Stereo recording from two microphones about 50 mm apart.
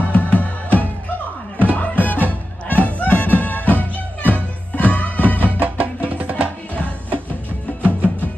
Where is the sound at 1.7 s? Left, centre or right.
Left.